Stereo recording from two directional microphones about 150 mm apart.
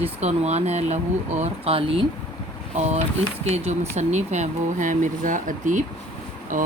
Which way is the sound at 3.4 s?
45° right (ahead or behind).